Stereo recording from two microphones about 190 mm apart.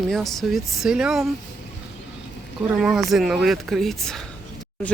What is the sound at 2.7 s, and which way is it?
Speech, centre (ahead or behind).